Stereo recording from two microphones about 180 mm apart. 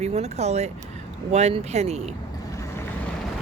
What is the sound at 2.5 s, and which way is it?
Boat, 15° left (ahead or behind).